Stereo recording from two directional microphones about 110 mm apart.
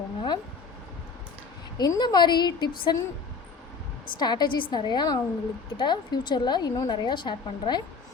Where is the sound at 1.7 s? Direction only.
40° left (ahead or behind).